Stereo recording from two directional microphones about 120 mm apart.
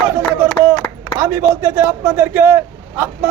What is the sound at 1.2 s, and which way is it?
Speech, 20° right (ahead or behind).